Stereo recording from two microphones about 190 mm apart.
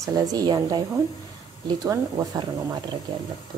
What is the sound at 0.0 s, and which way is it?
Speech, 20° right (ahead or behind).